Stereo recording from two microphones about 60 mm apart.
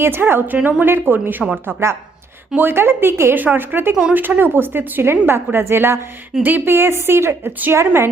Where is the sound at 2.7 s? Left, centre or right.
Right.